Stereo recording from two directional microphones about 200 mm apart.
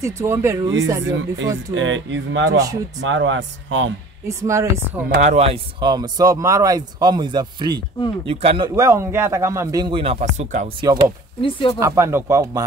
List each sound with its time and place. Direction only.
0.0 s speech: 15° right (ahead or behind)
1.0 s speech: 70° right (ahead or behind)
2.5 s speech: 15° right (ahead or behind)
3.0 s speech: 65° right (ahead or behind)
4.3 s speech: 15° right (ahead or behind)
5.1 s speech: 35° right (ahead or behind)
10.8 s speech: 25° right (ahead or behind)
11.4 s speech: 25° left (ahead or behind)
11.8 s speech: 15° right (ahead or behind)